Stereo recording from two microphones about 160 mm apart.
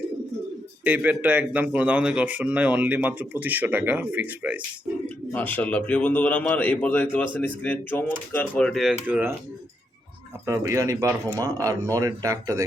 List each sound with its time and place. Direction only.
0.9 s a man's voice: 10° right (ahead or behind)
5.0 s speech: 10° left (ahead or behind)
9.0 s a man's voice: 10° right (ahead or behind)
10.4 s a man's voice: 20° right (ahead or behind)